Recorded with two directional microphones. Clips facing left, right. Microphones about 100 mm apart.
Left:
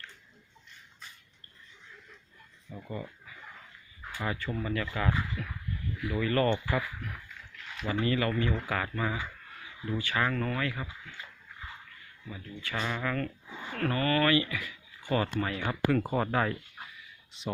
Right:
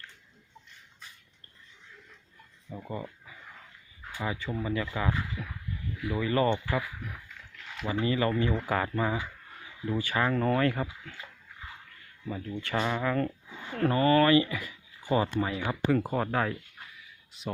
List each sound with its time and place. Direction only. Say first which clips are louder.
2.8 s speech: right 1 dB; 25° right (ahead or behind)
4.5 s speech: right 1 dB; 15° right (ahead or behind)
7.9 s speech: right 1 dB; 20° right (ahead or behind); by 10.8 s 40° right (ahead or behind)
12.3 s speech: right 6 dB; 45° right (ahead or behind)
12.8 s speech: right 3 dB; 25° right (ahead or behind)
15.1 s speech: right 2 dB; 15° right (ahead or behind); by 17.5 s centre (ahead or behind)